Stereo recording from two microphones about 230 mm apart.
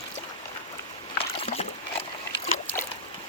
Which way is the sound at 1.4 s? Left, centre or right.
Left.